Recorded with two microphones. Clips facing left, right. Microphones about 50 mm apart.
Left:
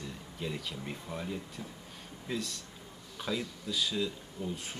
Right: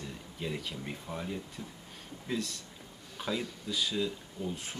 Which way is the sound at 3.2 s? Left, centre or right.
Centre.